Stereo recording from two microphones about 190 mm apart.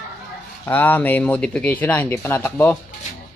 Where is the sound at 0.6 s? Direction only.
10° left (ahead or behind).